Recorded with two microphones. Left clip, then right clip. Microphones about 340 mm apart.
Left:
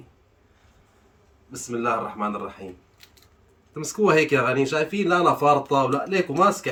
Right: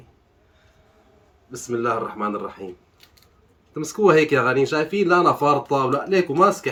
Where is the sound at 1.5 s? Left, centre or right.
Centre.